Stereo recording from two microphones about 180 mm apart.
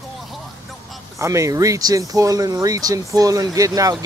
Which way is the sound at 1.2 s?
15° right (ahead or behind).